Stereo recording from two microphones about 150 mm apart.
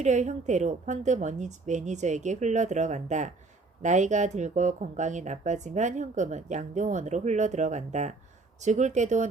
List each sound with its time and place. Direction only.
0.0 s speech: 50° right (ahead or behind)